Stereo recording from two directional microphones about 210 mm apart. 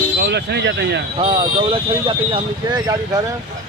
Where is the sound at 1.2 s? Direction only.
25° right (ahead or behind).